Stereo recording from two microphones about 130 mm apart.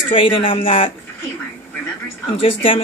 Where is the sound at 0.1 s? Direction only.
45° left (ahead or behind).